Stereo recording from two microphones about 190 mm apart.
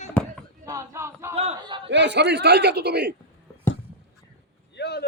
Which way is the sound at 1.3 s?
30° right (ahead or behind).